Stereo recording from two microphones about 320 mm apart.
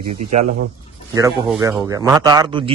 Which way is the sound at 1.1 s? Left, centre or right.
Centre.